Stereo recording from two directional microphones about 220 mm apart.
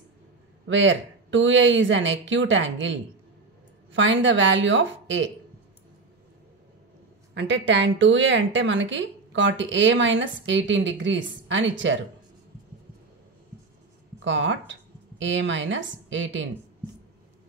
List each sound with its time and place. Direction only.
0.7 s a woman's voice: 55° right (ahead or behind)
7.3 s a woman's voice: 55° right (ahead or behind)
14.2 s speech: 55° right (ahead or behind)